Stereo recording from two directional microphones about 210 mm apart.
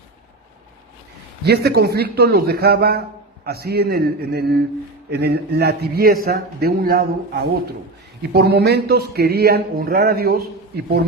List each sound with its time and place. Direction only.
1.5 s speech: 50° right (ahead or behind)